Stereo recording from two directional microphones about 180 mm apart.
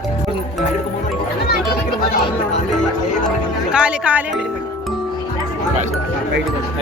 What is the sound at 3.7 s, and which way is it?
Music, 5° right (ahead or behind).